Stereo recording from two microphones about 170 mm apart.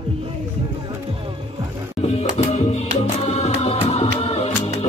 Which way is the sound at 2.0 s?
35° left (ahead or behind).